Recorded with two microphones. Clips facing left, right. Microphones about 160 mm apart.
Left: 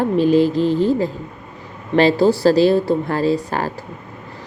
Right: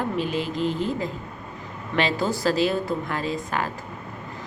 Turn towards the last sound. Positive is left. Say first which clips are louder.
# left 8 dB
turn(degrees=35)  # may be behind; listen again after turning